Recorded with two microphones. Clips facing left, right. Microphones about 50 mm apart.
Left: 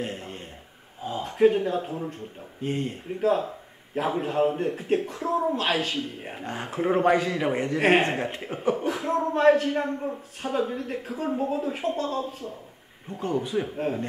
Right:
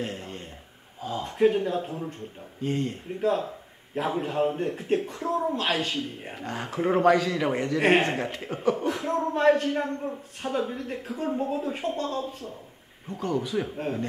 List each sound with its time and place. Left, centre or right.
0.0 s a sound: centre
1.2 s a man's voice: centre
2.6 s a man's voice: centre
3.1 s a man's voice: centre
6.4 s a man's voice: centre
7.0 s a man's voice: centre
7.8 s a man's voice: centre
13.2 s a man's voice: left
13.6 s a man's voice: centre